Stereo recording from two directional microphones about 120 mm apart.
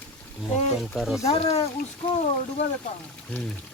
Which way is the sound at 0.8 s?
Centre (ahead or behind).